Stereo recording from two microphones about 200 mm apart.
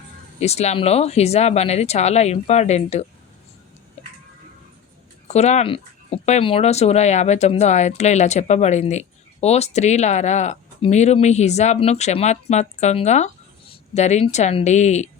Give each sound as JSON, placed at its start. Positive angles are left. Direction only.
{"t": 0.3, "sound": "speech", "side_deg": 30}
{"t": 5.3, "sound": "speech", "side_deg": 35}